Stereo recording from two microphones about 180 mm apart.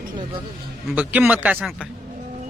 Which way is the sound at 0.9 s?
10° right (ahead or behind).